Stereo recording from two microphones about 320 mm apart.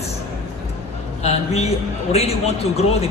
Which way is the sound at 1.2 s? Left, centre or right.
Centre.